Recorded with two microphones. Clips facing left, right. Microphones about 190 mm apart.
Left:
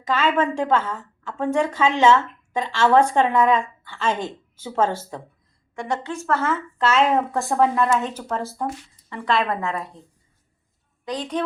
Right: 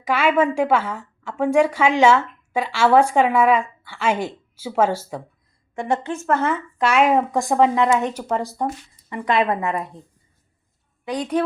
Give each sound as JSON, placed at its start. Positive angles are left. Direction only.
{"t": 0.0, "sound": "a woman's voice", "side_deg": -10}
{"t": 6.2, "sound": "a woman's voice", "side_deg": -15}
{"t": 11.0, "sound": "a woman's voice", "side_deg": -10}